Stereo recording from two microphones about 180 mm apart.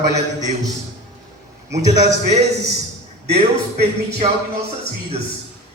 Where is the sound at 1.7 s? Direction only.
40° right (ahead or behind).